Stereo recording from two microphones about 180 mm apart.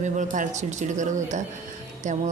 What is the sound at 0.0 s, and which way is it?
A woman's voice, 45° right (ahead or behind).